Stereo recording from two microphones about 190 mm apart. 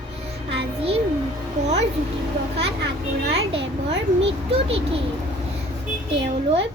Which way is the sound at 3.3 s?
30° right (ahead or behind).